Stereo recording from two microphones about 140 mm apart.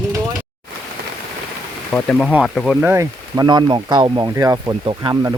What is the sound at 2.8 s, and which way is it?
Speech, 20° right (ahead or behind).